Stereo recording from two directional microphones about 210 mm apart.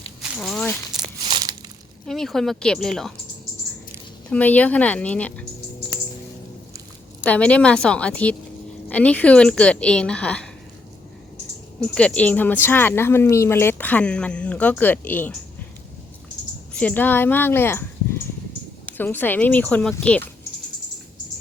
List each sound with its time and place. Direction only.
0.2 s a sound: centre (ahead or behind)
1.2 s crumpling: 20° right (ahead or behind)
2.0 s a woman's voice: centre (ahead or behind)
4.3 s a woman's voice: 5° left (ahead or behind)
7.2 s a woman's voice: 5° left (ahead or behind)
11.8 s a woman's voice: 5° left (ahead or behind)
16.8 s a woman's voice: 10° left (ahead or behind)
18.9 s a woman's voice: 10° left (ahead or behind)